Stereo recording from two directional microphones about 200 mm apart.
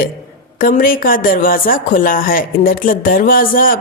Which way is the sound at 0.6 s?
45° left (ahead or behind).